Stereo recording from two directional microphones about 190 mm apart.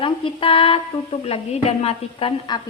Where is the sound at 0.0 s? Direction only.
30° left (ahead or behind).